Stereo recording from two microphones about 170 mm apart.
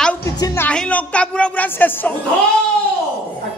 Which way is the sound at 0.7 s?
5° left (ahead or behind).